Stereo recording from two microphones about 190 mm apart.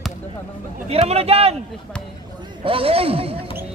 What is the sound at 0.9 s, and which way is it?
Speech, 35° right (ahead or behind).